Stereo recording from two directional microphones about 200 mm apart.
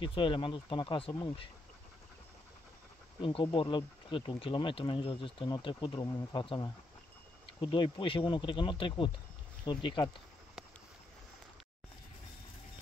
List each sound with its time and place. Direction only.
0.0 s speech: 25° left (ahead or behind)
3.2 s speech: 25° left (ahead or behind)